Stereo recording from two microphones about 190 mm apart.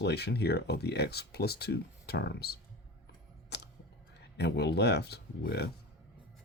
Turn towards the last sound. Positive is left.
turn(degrees=60)  # may be behind; listen again after turning